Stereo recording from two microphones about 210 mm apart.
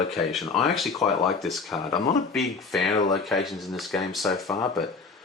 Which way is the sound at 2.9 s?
35° left (ahead or behind).